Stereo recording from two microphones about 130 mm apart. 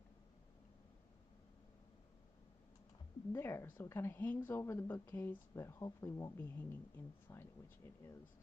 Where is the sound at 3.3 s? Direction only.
20° left (ahead or behind).